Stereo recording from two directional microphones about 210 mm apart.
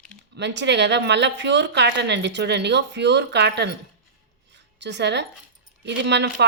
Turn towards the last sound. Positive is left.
turn(degrees=-55)  # may be behind; listen again after turning